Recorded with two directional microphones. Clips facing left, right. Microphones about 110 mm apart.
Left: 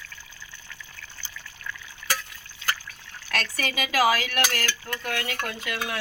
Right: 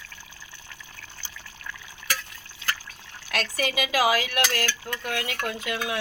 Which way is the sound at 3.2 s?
20° right (ahead or behind).